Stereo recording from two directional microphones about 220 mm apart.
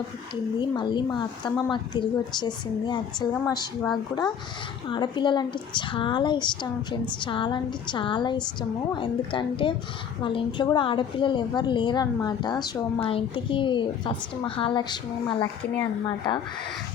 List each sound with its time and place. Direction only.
0.6 s a woman's voice: 20° left (ahead or behind)
4.9 s a woman's voice: 20° left (ahead or behind)